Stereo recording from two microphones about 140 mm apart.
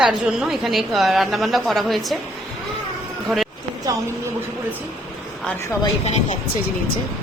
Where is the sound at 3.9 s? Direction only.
25° right (ahead or behind).